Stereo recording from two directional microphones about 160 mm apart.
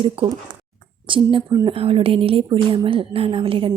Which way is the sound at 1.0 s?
30° right (ahead or behind).